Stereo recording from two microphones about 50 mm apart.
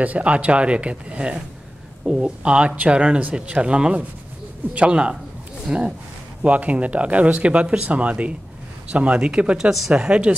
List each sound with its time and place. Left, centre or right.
0.0 s speech: right
6.4 s speech: right
9.7 s speech: centre